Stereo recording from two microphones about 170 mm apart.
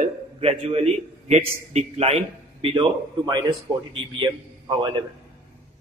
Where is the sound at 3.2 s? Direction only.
20° right (ahead or behind).